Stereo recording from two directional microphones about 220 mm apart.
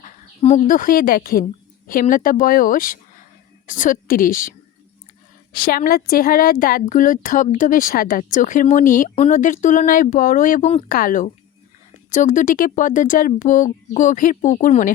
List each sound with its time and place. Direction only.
0.0 s a woman's voice: 35° left (ahead or behind)
5.5 s a woman's voice: 40° left (ahead or behind)